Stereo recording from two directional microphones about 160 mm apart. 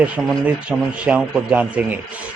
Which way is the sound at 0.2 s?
Centre (ahead or behind).